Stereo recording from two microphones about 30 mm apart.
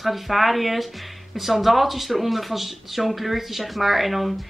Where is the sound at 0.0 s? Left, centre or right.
Centre.